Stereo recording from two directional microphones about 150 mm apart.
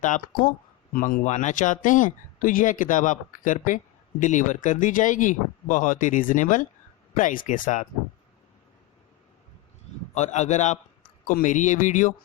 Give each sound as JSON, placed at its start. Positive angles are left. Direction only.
{"t": 0.0, "sound": "speech", "side_deg": 65}
{"t": 10.2, "sound": "a man's voice", "side_deg": 50}
{"t": 11.3, "sound": "speech", "side_deg": 60}